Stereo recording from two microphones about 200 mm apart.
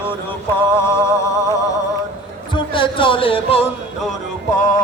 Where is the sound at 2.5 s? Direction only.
25° left (ahead or behind).